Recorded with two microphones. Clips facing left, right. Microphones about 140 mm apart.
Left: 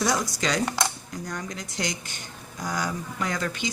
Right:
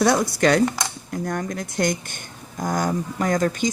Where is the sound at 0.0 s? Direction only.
55° right (ahead or behind).